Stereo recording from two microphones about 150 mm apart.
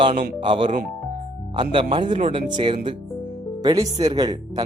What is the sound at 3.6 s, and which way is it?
Speech, 25° right (ahead or behind).